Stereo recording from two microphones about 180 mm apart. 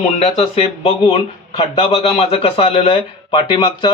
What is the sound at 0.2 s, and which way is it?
A man's voice, 35° left (ahead or behind).